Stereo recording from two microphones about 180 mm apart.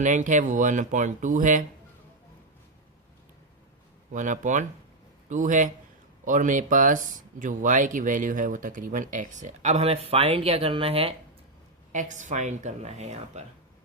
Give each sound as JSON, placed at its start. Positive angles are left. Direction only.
{"t": 0.0, "sound": "speech", "side_deg": -45}
{"t": 4.1, "sound": "speech", "side_deg": -45}
{"t": 11.9, "sound": "speech", "side_deg": -45}